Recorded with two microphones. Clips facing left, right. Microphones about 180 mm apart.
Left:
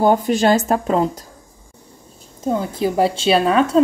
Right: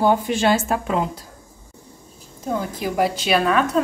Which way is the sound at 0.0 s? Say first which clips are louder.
Left 3 dB; 40° left (ahead or behind).